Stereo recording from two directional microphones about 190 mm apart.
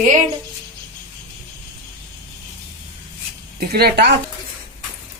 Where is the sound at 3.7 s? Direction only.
55° right (ahead or behind).